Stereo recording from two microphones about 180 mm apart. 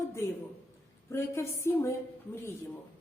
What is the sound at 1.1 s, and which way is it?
Speech, 15° left (ahead or behind).